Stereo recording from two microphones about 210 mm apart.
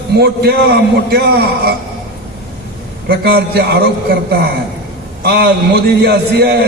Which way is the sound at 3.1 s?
50° right (ahead or behind).